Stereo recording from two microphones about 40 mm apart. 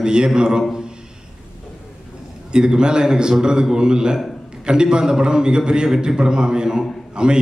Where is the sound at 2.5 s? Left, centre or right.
Right.